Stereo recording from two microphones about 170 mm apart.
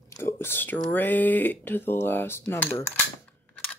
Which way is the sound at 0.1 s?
15° left (ahead or behind).